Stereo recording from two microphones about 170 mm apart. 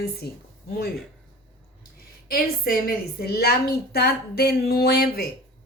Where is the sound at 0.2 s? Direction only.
70° left (ahead or behind).